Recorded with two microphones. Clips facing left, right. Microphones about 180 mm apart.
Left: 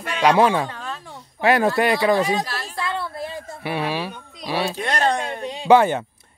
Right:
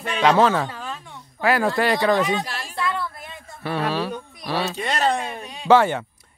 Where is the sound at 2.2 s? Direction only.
30° left (ahead or behind).